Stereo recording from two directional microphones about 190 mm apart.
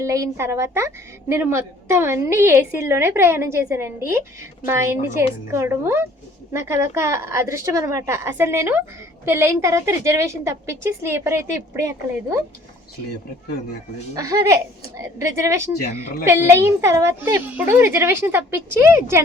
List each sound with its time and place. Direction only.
0.0 s a woman's voice: 15° right (ahead or behind)
14.2 s a woman's voice: 15° right (ahead or behind)